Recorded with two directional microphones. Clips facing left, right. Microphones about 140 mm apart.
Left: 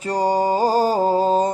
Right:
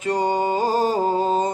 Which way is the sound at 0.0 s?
35° left (ahead or behind).